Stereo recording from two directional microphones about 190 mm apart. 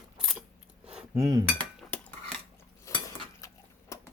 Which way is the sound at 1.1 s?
15° right (ahead or behind).